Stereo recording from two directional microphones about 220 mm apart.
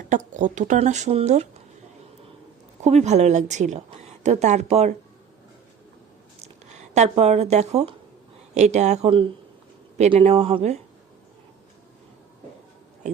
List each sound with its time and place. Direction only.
0.1 s speech: 35° right (ahead or behind)
2.8 s speech: 30° right (ahead or behind)
6.4 s speech: 30° right (ahead or behind)